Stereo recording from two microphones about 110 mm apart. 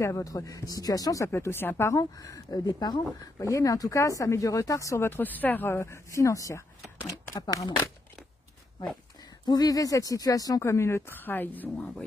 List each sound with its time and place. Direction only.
0.0 s speech: 30° left (ahead or behind)
9.5 s speech: 35° left (ahead or behind); by 11.9 s 15° left (ahead or behind)